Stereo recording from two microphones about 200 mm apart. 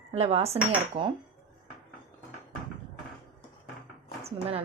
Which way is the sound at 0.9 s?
30° right (ahead or behind).